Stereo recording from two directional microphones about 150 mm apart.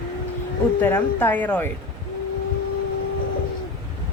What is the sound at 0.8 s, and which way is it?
Speech, 15° left (ahead or behind).